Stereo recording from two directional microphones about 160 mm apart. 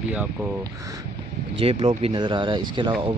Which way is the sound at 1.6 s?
35° right (ahead or behind).